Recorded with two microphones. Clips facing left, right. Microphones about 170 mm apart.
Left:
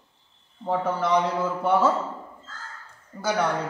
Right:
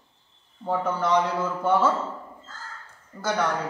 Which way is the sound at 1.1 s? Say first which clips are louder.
Even; 5° left (ahead or behind).